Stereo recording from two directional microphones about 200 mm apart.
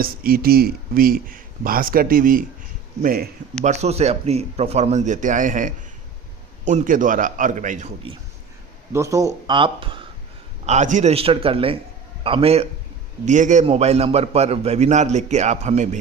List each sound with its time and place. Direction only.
0.0 s speech: 45° right (ahead or behind)
3.6 s a man's voice: 35° right (ahead or behind)
8.9 s speech: 15° right (ahead or behind)
10.7 s a man's voice: 35° right (ahead or behind)